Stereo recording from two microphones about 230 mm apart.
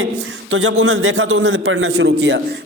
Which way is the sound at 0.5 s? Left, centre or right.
Right.